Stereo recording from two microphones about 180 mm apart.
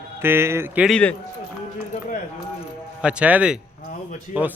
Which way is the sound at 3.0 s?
5° right (ahead or behind).